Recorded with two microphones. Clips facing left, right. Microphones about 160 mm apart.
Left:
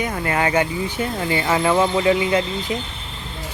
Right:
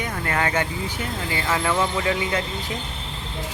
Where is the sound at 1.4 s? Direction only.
25° left (ahead or behind).